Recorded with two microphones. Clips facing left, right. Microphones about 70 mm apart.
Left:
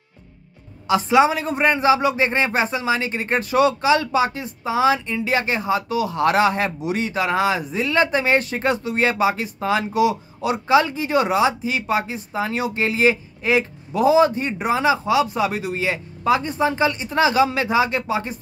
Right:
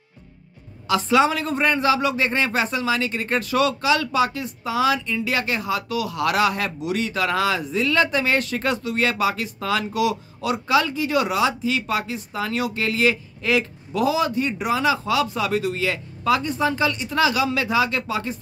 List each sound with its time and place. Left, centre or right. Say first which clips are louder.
0.8 s a man's voice: left 2 dB; left